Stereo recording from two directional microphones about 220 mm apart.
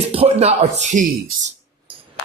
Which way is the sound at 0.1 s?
25° right (ahead or behind).